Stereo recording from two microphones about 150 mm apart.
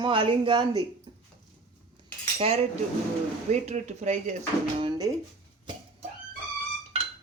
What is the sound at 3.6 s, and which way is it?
Speech, 50° right (ahead or behind).